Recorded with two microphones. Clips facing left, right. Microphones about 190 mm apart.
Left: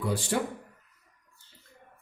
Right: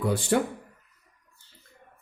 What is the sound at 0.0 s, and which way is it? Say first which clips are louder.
Speech: right 5 dB; 55° right (ahead or behind).